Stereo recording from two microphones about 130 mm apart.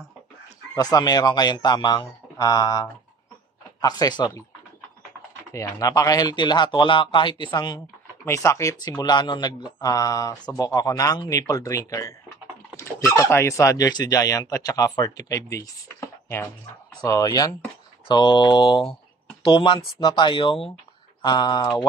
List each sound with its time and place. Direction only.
0.7 s a man's voice: 30° left (ahead or behind)
5.5 s a man's voice: 25° left (ahead or behind)
8.3 s a man's voice: 20° left (ahead or behind)